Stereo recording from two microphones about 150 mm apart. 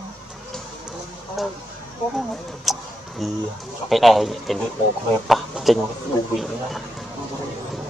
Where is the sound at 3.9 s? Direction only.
Centre (ahead or behind).